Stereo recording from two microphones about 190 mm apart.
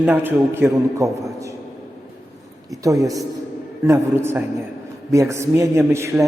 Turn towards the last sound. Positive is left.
turn(degrees=-15)  # may be behind; listen again after turning